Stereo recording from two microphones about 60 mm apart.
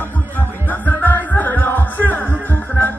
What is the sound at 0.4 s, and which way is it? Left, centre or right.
Music, left.